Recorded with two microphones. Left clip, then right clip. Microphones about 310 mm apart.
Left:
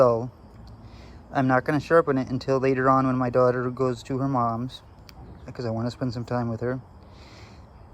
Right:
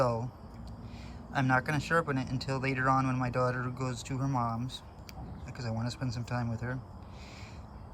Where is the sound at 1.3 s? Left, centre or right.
Centre.